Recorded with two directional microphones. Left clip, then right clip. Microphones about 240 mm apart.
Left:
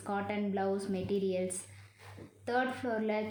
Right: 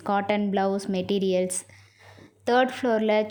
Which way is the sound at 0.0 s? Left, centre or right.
Right.